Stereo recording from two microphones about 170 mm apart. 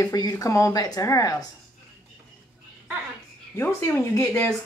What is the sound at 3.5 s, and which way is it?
Speech, 10° left (ahead or behind).